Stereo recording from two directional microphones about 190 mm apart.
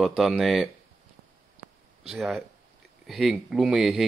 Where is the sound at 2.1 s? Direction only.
Centre (ahead or behind).